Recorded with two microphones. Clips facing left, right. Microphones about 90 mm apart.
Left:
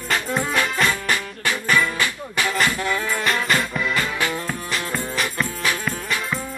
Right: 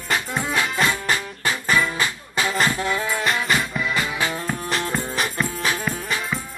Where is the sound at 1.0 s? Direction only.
25° right (ahead or behind).